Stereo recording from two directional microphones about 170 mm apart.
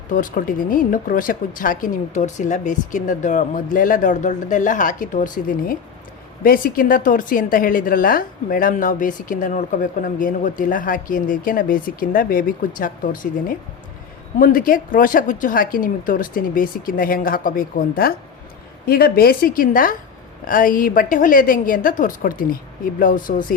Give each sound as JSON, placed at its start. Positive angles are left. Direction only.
{"t": 0.1, "sound": "a woman's voice", "side_deg": 50}